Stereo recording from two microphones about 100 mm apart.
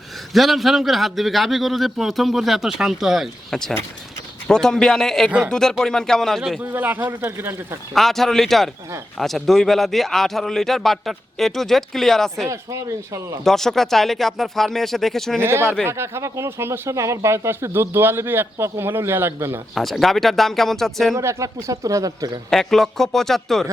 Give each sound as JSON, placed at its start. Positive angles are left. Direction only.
{"t": 0.3, "sound": "a man's voice", "side_deg": 0}
{"t": 6.6, "sound": "speech", "side_deg": -20}
{"t": 7.9, "sound": "a man's voice", "side_deg": 0}
{"t": 12.5, "sound": "speech", "side_deg": -30}
{"t": 13.4, "sound": "a man's voice", "side_deg": 5}
{"t": 15.4, "sound": "speech", "side_deg": -25}
{"t": 19.7, "sound": "a man's voice", "side_deg": 0}
{"t": 21.2, "sound": "speech", "side_deg": -30}
{"t": 22.4, "sound": "a man's voice", "side_deg": 5}